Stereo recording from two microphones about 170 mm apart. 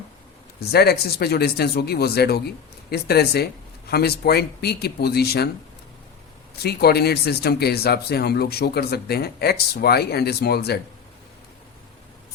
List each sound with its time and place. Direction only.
0.6 s speech: 70° left (ahead or behind)
6.6 s speech: 70° left (ahead or behind)